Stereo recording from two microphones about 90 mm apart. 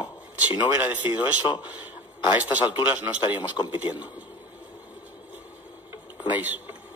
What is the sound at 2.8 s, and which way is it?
A man's voice, 20° right (ahead or behind).